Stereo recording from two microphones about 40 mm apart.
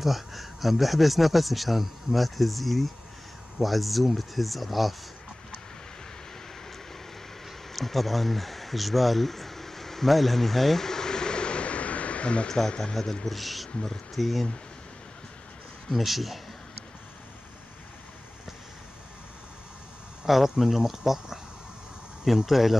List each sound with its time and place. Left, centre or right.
0.0 s a man's voice: centre
7.7 s a sound: centre; by 12.4 s left
12.4 s speech: centre
13.3 s a man's voice: centre
15.9 s a man's voice: centre
20.2 s a man's voice: centre
22.5 s a man's voice: centre